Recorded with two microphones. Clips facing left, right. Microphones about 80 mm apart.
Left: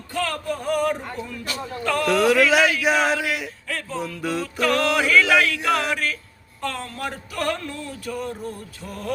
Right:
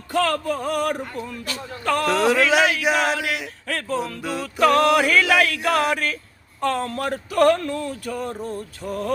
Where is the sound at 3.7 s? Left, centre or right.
Right.